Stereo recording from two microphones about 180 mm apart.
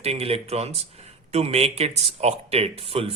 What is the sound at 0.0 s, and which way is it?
A man's voice, 35° right (ahead or behind).